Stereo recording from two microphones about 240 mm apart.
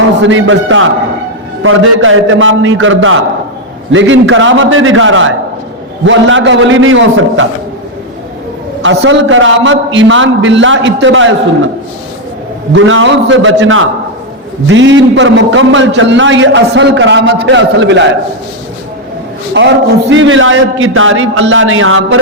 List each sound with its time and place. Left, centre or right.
0.2 s a man's voice: right
8.8 s a man's voice: right
12.7 s a man's voice: right
19.5 s a man's voice: right